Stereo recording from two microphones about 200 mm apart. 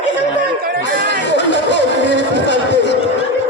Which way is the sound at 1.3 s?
65° left (ahead or behind).